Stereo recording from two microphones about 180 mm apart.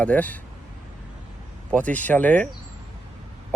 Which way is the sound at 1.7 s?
10° left (ahead or behind).